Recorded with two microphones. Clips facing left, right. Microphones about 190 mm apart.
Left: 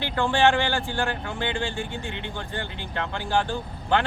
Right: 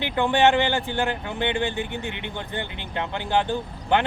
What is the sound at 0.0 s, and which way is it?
A man's voice, 20° right (ahead or behind).